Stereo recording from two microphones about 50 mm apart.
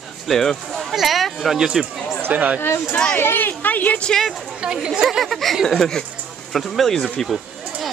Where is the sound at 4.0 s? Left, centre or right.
Centre.